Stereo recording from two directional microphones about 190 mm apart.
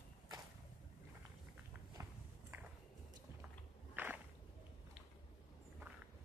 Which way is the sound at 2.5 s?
15° right (ahead or behind).